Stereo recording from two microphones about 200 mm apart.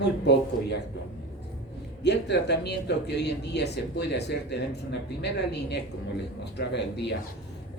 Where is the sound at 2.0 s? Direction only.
60° left (ahead or behind).